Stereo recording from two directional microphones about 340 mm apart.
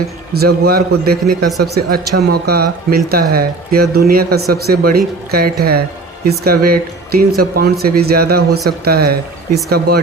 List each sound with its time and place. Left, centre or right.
0.3 s speech: right